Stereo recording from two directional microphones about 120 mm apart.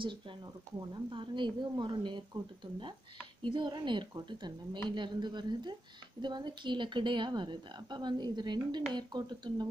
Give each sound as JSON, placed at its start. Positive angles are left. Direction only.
{"t": 0.7, "sound": "a woman's voice", "side_deg": -45}